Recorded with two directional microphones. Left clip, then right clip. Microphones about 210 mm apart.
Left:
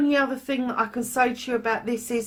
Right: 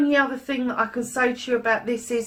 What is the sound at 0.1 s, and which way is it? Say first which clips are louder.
Speech: right 2 dB; 45° left (ahead or behind).